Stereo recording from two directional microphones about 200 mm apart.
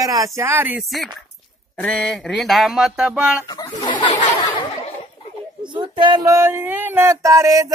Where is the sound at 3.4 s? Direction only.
20° left (ahead or behind).